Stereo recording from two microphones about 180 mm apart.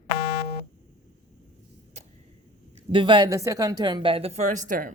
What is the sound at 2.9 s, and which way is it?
A woman's voice, 30° right (ahead or behind).